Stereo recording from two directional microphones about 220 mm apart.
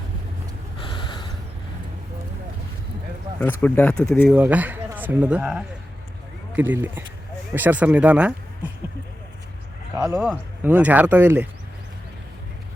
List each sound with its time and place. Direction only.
0.8 s gasp: 20° left (ahead or behind)
3.4 s speech: 5° left (ahead or behind)
10.0 s speech: 5° right (ahead or behind)